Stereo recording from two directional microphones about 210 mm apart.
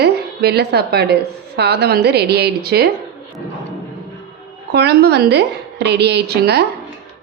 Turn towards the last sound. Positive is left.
turn(degrees=-50)  # may be behind; listen again after turning